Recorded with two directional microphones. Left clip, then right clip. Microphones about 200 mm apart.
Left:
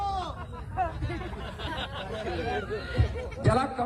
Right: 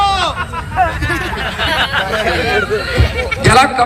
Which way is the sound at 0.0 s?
15° left (ahead or behind).